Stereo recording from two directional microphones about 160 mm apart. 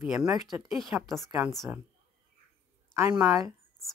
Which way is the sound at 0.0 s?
5° right (ahead or behind).